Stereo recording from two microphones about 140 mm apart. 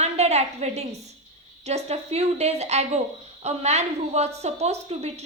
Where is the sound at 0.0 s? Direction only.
50° right (ahead or behind).